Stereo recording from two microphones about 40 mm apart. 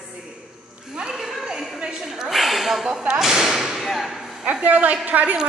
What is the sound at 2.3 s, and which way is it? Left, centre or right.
Snort, centre.